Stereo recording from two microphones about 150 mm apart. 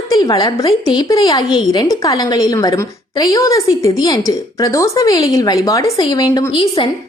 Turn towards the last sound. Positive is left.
turn(degrees=35)  # may be behind; listen again after turning